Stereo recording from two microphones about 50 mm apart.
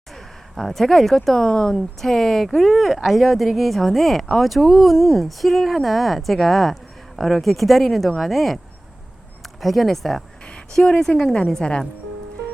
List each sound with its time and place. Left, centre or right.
0.5 s speech: centre
10.4 s a sound: centre
11.1 s speech: centre